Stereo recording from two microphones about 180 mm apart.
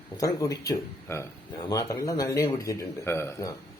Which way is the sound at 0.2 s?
20° left (ahead or behind).